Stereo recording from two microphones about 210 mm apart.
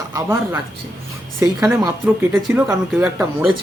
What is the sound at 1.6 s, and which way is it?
Speech, 10° right (ahead or behind).